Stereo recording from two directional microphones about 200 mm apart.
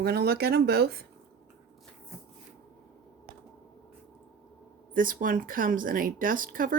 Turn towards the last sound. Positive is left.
turn(degrees=-45)  # may be behind; listen again after turning